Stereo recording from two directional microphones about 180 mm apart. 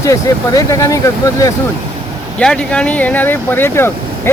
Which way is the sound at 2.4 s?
5° left (ahead or behind).